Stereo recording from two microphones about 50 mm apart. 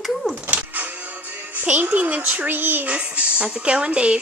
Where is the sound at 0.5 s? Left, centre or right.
Right.